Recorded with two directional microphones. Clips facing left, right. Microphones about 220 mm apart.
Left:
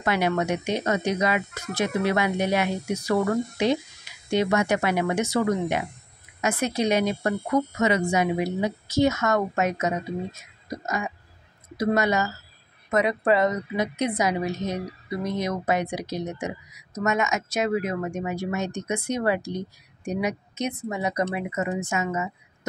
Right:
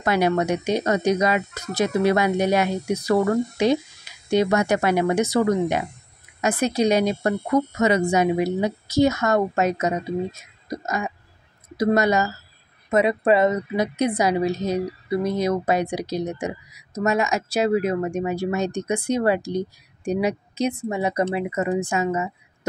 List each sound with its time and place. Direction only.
0.0 s a woman's voice: 40° right (ahead or behind)
11.7 s a woman's voice: 40° right (ahead or behind)
12.9 s a woman's voice: 25° right (ahead or behind)